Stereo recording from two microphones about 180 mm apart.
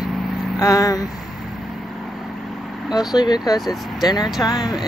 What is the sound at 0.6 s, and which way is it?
Speech, 20° left (ahead or behind).